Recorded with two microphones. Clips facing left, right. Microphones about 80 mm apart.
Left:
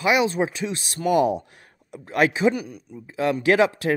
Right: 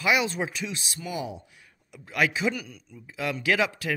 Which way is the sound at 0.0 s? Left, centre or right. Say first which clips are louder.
Left 5 dB; left.